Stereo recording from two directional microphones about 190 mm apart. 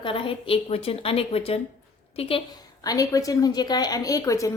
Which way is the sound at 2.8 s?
20° left (ahead or behind).